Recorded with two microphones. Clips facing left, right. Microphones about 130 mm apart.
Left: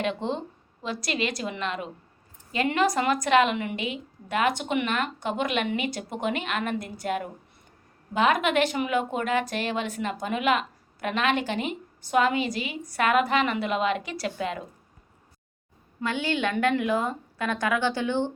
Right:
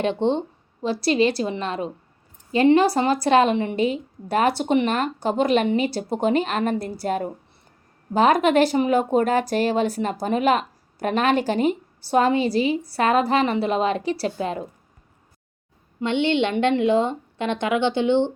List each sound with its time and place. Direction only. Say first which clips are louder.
0.0 s speech: right 7 dB; 30° right (ahead or behind)
16.0 s a woman's voice: right 7 dB; 25° right (ahead or behind)